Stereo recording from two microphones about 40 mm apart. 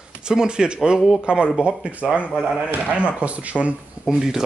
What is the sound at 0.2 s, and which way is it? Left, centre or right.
Speech, centre.